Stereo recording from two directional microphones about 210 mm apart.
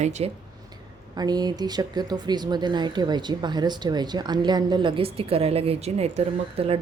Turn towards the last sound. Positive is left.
turn(degrees=-30)  # may be behind; listen again after turning